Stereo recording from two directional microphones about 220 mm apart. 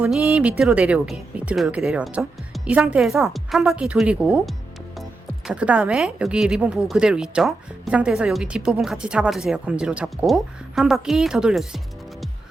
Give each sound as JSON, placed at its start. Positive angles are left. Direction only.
{"t": 0.0, "sound": "speech", "side_deg": -5}